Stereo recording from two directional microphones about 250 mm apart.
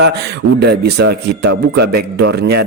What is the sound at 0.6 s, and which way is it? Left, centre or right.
Speech, right.